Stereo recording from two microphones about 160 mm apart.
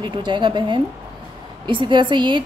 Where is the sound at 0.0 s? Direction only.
30° right (ahead or behind).